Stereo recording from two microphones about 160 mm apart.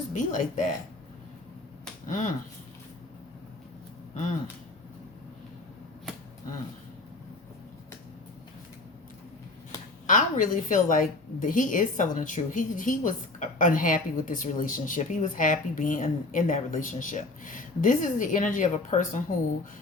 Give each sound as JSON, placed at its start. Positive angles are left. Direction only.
{"t": 0.1, "sound": "speech", "side_deg": 50}
{"t": 2.0, "sound": "speech", "side_deg": 50}
{"t": 10.1, "sound": "a woman's voice", "side_deg": 55}